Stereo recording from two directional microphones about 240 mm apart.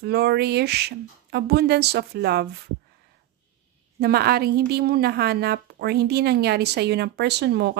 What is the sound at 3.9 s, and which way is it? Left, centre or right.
A woman's voice, right.